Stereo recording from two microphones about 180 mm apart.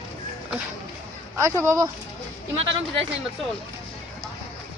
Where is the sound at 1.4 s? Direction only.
15° right (ahead or behind).